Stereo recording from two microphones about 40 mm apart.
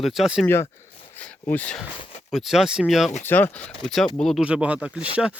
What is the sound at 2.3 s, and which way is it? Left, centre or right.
Speech, centre.